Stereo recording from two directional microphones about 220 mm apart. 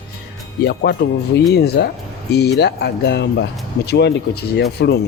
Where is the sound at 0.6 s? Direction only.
45° left (ahead or behind).